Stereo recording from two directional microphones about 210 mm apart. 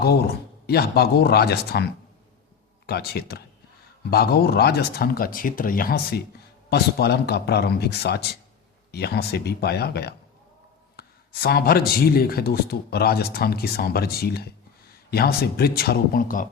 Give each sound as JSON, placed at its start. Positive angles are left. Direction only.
{"t": 0.7, "sound": "speech", "side_deg": 50}